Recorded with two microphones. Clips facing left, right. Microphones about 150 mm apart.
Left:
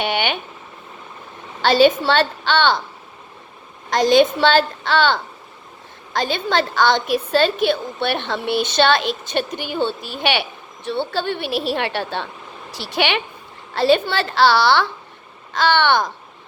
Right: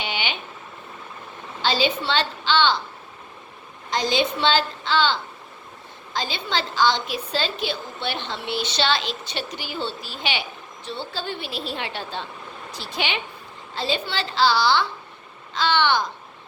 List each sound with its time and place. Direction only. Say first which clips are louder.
0.0 s a sound: left 8 dB; 60° left (ahead or behind)
1.6 s a woman's voice: left 9 dB; 60° left (ahead or behind)
3.9 s a woman's voice: left 9 dB; 55° left (ahead or behind)